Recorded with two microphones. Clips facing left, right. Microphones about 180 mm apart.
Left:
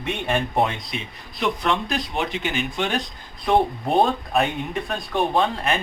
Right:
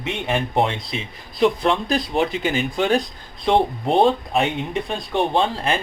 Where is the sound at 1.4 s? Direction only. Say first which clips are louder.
Right 5 dB; 30° right (ahead or behind).